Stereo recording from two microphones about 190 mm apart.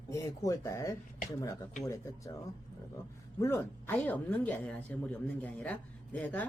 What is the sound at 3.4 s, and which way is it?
Speech, 15° left (ahead or behind).